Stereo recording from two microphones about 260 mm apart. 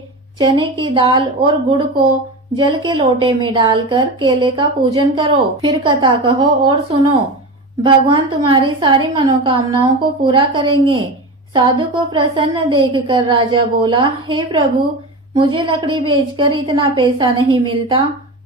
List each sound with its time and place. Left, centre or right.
0.3 s a woman's voice: centre